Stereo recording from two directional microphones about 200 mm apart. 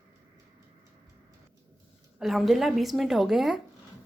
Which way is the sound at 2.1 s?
Centre (ahead or behind).